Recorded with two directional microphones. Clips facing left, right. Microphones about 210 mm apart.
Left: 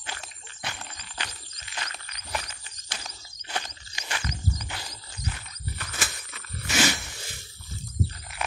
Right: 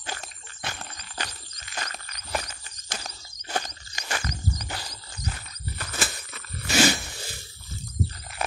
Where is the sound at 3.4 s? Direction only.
45° right (ahead or behind).